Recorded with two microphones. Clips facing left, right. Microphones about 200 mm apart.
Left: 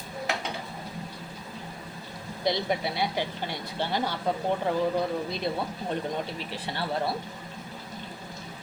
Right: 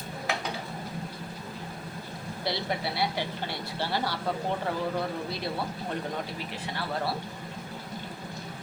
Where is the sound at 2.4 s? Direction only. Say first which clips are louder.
Left 4 dB; 15° left (ahead or behind).